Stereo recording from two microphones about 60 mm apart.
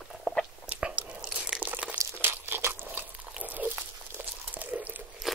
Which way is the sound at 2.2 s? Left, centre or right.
Right.